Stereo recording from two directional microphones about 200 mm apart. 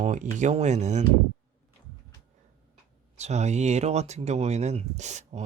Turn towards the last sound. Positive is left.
turn(degrees=-35)  # may be behind; listen again after turning